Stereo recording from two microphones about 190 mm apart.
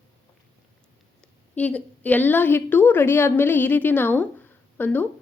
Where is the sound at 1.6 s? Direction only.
5° left (ahead or behind).